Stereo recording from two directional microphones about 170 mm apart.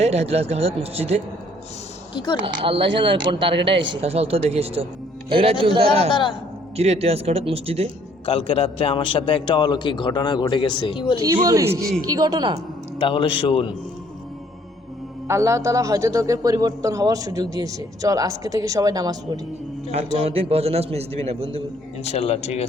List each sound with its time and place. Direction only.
0.0 s a man's voice: 40° right (ahead or behind)
2.6 s a man's voice: 30° right (ahead or behind)
3.5 s speech: 90° right
4.0 s a man's voice: 35° right (ahead or behind)
8.3 s a man's voice: 35° left (ahead or behind)
11.4 s a man's voice: 15° right (ahead or behind)
13.0 s a man's voice: 30° left (ahead or behind)
15.3 s a man's voice: 15° right (ahead or behind)
20.2 s a man's voice: 35° right (ahead or behind)
22.0 s a man's voice: 35° left (ahead or behind)